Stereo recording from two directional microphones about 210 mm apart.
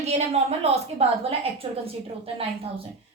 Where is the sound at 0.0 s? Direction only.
30° right (ahead or behind).